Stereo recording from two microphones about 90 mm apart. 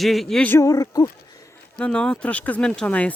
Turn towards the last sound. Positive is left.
turn(degrees=15)  # may be behind; listen again after turning